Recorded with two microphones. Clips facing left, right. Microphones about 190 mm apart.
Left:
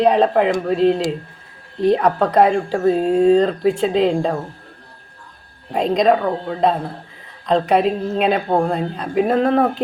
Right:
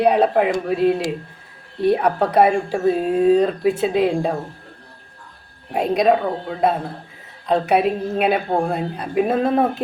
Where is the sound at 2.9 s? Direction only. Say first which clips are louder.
Left 2 dB; 25° left (ahead or behind).